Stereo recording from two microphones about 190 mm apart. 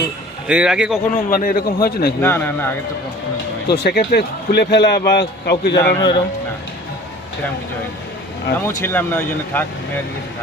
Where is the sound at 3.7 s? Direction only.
55° left (ahead or behind).